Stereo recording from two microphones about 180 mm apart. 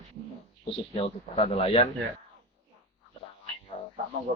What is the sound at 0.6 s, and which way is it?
A man's voice, 30° left (ahead or behind).